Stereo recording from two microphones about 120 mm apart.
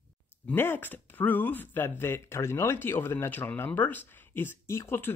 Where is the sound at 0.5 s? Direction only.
15° left (ahead or behind).